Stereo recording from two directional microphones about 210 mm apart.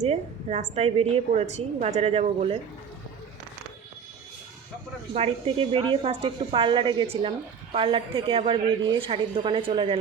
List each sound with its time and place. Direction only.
0.0 s a woman's voice: 30° right (ahead or behind)
5.1 s a woman's voice: 30° right (ahead or behind)